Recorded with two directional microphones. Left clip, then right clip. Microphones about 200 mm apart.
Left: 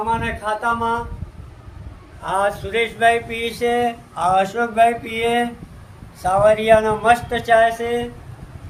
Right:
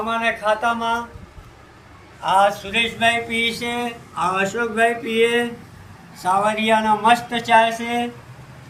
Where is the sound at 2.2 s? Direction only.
25° left (ahead or behind).